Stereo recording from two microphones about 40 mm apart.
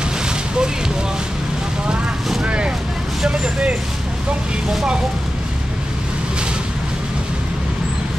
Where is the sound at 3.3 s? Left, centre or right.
Centre.